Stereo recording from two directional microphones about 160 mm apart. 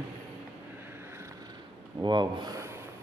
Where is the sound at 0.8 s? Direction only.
15° right (ahead or behind).